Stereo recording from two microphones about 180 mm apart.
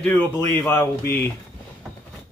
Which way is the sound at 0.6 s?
15° left (ahead or behind).